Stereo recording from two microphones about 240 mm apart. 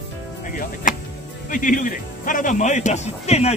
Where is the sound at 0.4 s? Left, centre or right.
Left.